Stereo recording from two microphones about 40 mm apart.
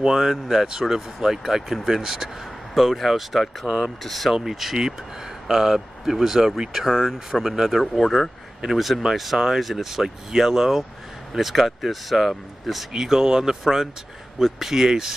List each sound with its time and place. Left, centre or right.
0.0 s speech: centre
3.7 s speech: right
4.0 s speech: centre
12.9 s speech: centre